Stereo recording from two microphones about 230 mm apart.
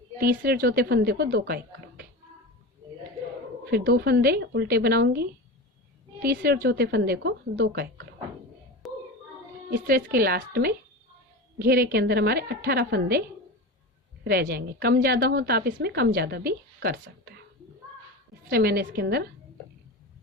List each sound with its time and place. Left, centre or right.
0.2 s a woman's voice: right
3.7 s a woman's voice: right
8.8 s a sound: centre
9.6 s a woman's voice: right
14.3 s a woman's voice: right
18.5 s a woman's voice: right